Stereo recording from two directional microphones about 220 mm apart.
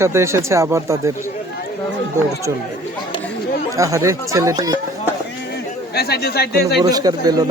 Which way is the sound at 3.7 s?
15° right (ahead or behind).